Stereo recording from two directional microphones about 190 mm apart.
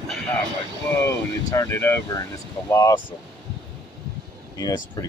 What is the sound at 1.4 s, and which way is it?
Speech, 15° left (ahead or behind).